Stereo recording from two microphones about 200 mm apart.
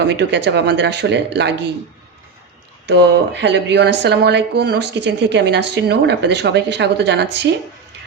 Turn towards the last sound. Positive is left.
turn(degrees=-60)  # may be behind; listen again after turning